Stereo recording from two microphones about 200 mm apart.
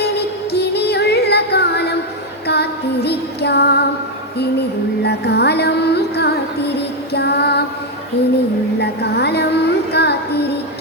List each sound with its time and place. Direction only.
0.5 s music: 55° left (ahead or behind)
2.5 s female singing: 55° left (ahead or behind)
5.0 s music: 55° left (ahead or behind)
8.8 s music: 55° left (ahead or behind)